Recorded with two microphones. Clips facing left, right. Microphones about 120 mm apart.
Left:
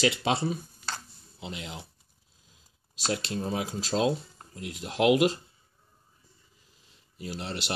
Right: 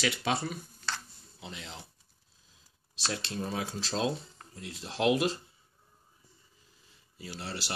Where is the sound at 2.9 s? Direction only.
15° left (ahead or behind).